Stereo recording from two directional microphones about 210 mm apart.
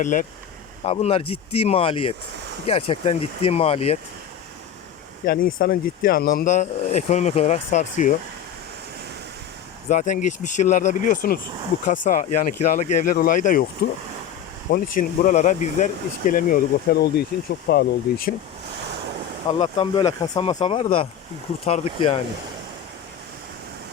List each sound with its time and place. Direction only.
0.0 s speech: 40° left (ahead or behind)
0.9 s speech: 30° left (ahead or behind)
5.2 s speech: 45° left (ahead or behind)
9.9 s speech: 35° left (ahead or behind)
14.7 s speech: 40° left (ahead or behind)
19.5 s speech: 25° left (ahead or behind)